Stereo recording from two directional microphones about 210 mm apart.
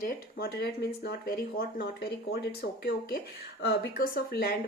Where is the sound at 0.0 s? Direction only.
45° left (ahead or behind).